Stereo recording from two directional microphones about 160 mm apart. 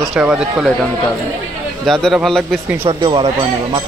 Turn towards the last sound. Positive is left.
turn(degrees=-30)  # may be behind; listen again after turning